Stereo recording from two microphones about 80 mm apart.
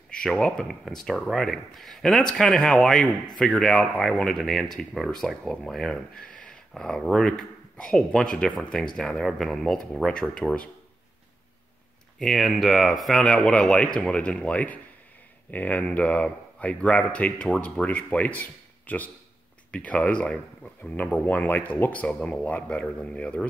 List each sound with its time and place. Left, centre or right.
0.1 s speech: centre
12.2 s speech: centre